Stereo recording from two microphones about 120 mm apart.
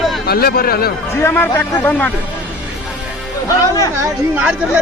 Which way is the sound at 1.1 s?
20° left (ahead or behind).